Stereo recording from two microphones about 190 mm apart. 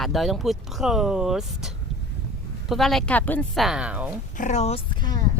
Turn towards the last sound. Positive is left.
turn(degrees=20)  # may be behind; listen again after turning